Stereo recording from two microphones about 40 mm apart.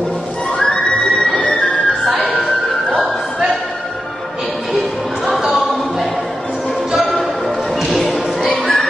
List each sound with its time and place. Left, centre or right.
0.6 s neigh: centre
1.1 s music: centre
2.0 s music: centre
5.3 s music: centre
7.0 s basketball bounce: centre
7.8 s music: centre
8.5 s a sound: centre